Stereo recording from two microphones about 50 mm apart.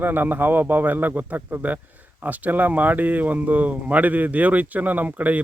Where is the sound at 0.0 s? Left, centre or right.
Right.